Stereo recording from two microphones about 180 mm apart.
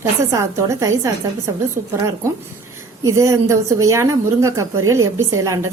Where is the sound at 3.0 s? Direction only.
15° right (ahead or behind).